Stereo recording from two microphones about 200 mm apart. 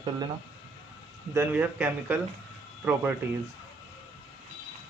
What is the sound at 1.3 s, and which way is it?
Speech, 10° right (ahead or behind).